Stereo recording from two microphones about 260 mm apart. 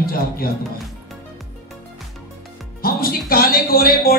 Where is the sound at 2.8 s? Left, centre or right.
Left.